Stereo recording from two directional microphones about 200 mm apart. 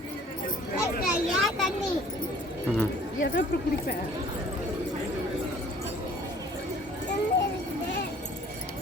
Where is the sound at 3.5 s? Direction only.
55° left (ahead or behind).